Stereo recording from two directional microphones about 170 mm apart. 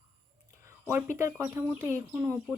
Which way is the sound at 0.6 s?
15° right (ahead or behind).